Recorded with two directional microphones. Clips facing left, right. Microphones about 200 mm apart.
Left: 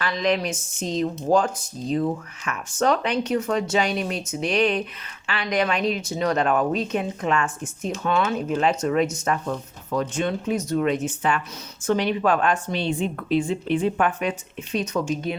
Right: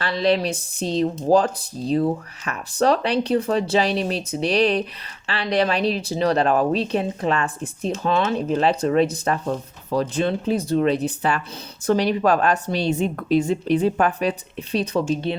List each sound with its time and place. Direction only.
0.0 s speech: 35° right (ahead or behind)